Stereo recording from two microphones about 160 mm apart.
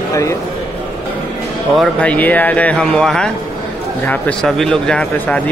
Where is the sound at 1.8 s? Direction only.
10° left (ahead or behind).